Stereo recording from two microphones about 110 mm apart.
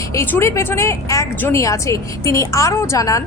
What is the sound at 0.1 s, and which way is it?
A woman's voice, 25° left (ahead or behind).